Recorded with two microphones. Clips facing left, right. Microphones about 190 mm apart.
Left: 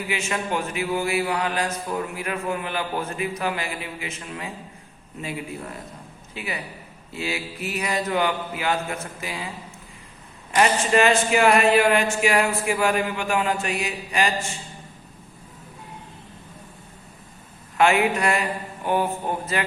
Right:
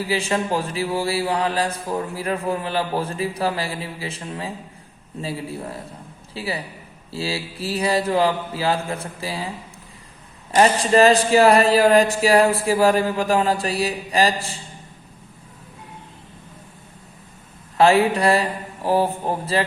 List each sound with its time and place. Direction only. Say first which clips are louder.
0.0 s mantra: right 5 dB; 35° right (ahead or behind)
10.5 s mantra: right 3 dB; 35° right (ahead or behind)
17.7 s mantra: right 4 dB; 35° right (ahead or behind)